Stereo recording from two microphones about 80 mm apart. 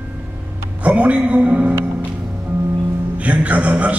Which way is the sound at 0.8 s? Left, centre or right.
Centre.